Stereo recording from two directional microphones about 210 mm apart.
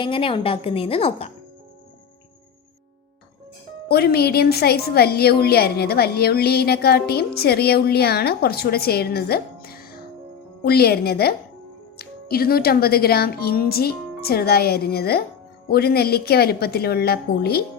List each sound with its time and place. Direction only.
0.0 s a woman's voice: 25° left (ahead or behind)
3.8 s speech: 50° left (ahead or behind)